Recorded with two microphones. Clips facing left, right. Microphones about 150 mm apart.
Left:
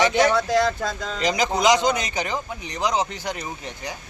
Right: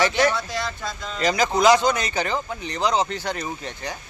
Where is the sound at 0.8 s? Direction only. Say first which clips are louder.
Left 4 dB; 90° left.